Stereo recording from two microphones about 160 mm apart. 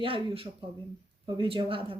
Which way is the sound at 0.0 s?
35° right (ahead or behind).